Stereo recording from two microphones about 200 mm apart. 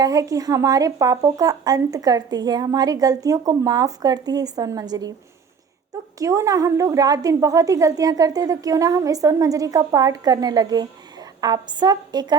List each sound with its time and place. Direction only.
0.0 s speech: 15° right (ahead or behind)
6.1 s a woman's voice: 15° right (ahead or behind)